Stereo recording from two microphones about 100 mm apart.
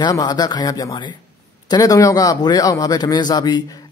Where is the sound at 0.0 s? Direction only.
45° left (ahead or behind).